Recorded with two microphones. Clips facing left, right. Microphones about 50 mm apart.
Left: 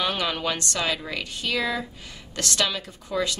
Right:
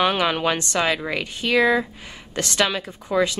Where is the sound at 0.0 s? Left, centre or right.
Right.